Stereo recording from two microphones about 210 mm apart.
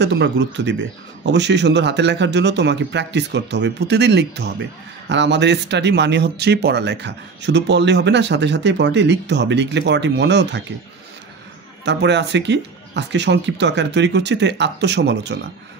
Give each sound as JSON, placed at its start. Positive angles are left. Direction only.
{"t": 0.0, "sound": "a man's voice", "side_deg": -55}
{"t": 11.8, "sound": "a man's voice", "side_deg": -55}